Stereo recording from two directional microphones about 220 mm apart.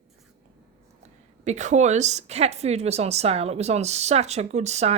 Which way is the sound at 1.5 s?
30° right (ahead or behind).